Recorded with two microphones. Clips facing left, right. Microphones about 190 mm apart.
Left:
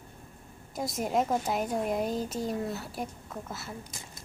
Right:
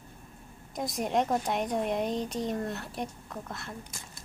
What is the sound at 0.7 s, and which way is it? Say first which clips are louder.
A woman's voice: even; centre (ahead or behind).